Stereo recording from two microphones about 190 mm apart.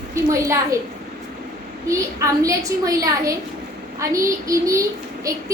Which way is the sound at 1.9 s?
15° right (ahead or behind).